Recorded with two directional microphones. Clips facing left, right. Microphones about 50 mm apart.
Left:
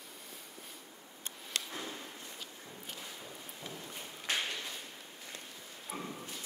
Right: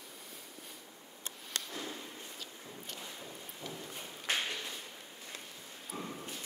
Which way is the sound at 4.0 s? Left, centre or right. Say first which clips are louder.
Even; centre.